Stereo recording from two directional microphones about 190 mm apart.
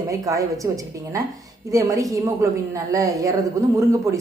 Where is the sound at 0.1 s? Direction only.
15° right (ahead or behind).